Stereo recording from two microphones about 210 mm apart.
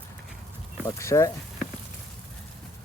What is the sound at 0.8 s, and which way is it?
Speech, 15° left (ahead or behind).